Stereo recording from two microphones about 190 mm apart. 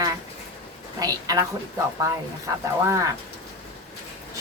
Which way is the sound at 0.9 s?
20° right (ahead or behind).